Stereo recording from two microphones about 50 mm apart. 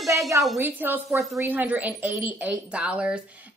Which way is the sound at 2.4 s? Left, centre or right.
Right.